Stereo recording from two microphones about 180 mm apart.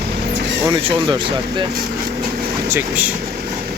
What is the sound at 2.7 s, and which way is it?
Speech, 10° right (ahead or behind).